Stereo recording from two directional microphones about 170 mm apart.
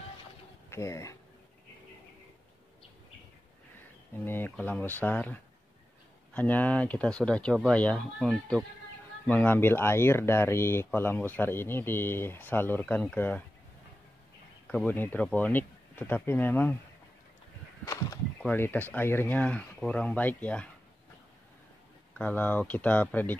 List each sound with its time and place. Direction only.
0.7 s speech: 15° left (ahead or behind)
4.2 s speech: 10° left (ahead or behind)
14.7 s speech: 10° left (ahead or behind)
18.4 s speech: 10° left (ahead or behind)
22.1 s speech: 10° left (ahead or behind)